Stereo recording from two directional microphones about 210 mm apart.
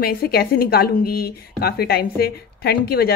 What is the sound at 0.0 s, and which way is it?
A woman's voice, 45° left (ahead or behind).